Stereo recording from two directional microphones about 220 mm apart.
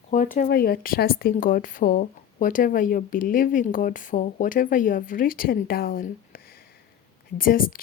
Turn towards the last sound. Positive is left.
turn(degrees=40)  # may be behind; listen again after turning